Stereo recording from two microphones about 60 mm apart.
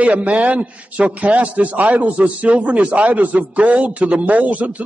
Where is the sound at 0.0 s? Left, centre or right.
Right.